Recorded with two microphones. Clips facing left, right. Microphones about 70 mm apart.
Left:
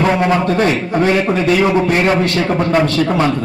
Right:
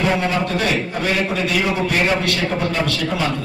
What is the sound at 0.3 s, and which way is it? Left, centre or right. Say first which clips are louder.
A man's voice: left 6 dB; left.